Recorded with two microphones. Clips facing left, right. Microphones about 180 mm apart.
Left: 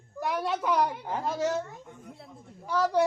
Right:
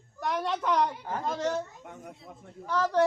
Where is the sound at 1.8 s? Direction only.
75° right (ahead or behind).